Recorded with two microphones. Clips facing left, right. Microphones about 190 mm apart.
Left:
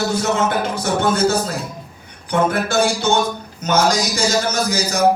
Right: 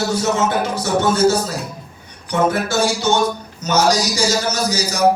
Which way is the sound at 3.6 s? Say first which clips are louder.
Right 1 dB; 55° left (ahead or behind).